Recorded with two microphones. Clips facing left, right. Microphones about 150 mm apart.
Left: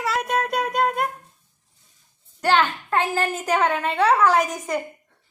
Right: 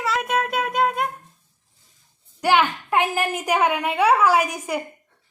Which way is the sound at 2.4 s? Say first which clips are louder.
Right 1 dB; 10° right (ahead or behind).